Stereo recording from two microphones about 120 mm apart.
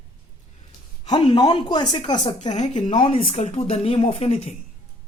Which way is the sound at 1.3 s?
40° left (ahead or behind).